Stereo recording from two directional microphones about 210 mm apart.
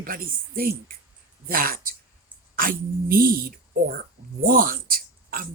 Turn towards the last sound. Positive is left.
turn(degrees=-45)  # may be behind; listen again after turning